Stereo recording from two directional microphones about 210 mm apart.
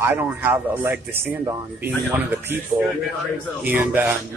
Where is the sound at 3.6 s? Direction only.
10° right (ahead or behind).